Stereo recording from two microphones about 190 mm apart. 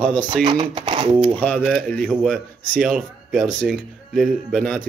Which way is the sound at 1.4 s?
10° left (ahead or behind).